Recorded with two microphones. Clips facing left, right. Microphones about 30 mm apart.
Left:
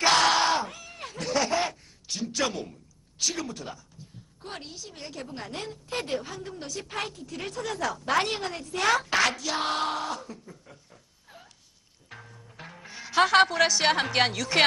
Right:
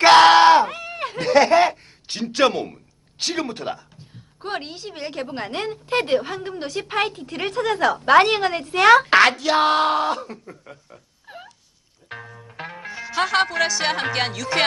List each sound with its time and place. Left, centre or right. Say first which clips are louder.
0.0 s a sound: right 11 dB; right
3.2 s a woman's voice: right 6 dB; right
12.0 s music: right 10 dB; right
12.9 s a woman's voice: even; centre